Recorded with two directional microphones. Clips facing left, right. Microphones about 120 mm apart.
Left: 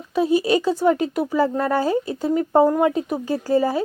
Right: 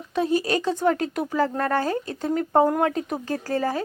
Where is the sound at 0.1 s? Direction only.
5° left (ahead or behind).